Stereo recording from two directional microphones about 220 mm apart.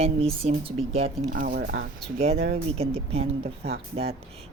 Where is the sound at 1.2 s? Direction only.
40° right (ahead or behind).